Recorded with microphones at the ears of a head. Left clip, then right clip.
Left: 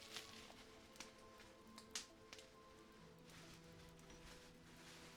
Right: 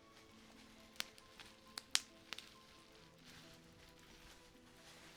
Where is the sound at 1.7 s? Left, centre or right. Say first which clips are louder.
Right 13 dB; right.